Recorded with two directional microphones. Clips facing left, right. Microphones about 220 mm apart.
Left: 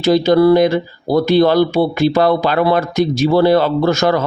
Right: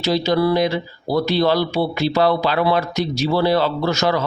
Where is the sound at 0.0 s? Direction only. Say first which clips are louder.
Left 7 dB; 50° left (ahead or behind).